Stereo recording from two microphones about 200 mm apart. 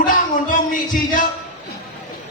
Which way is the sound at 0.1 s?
40° left (ahead or behind).